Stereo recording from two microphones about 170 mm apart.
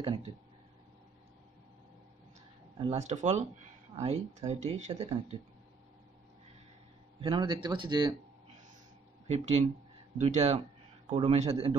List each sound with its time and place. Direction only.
2.8 s speech: 40° right (ahead or behind)
7.2 s speech: 25° right (ahead or behind)
9.3 s speech: 40° right (ahead or behind)